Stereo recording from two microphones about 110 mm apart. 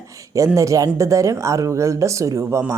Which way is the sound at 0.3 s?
30° right (ahead or behind).